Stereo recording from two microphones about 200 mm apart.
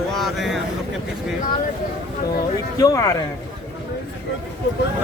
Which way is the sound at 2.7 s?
20° left (ahead or behind).